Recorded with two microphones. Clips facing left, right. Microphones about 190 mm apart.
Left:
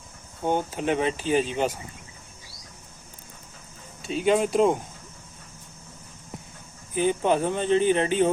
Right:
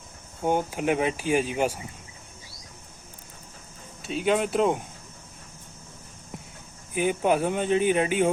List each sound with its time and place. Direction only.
0.4 s speech: 10° right (ahead or behind)
4.0 s speech: centre (ahead or behind)
6.9 s speech: 10° right (ahead or behind)